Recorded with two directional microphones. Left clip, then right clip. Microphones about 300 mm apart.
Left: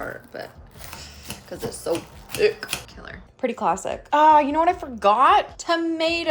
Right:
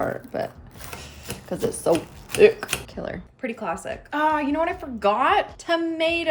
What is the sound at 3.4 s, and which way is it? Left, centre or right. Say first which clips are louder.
A woman's voice: left 6 dB; centre.